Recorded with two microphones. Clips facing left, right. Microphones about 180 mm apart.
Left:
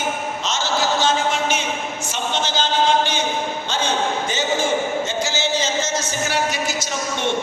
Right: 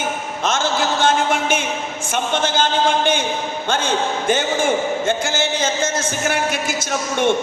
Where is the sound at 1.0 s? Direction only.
55° right (ahead or behind).